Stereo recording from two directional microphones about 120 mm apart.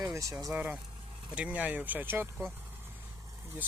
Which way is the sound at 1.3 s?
10° right (ahead or behind).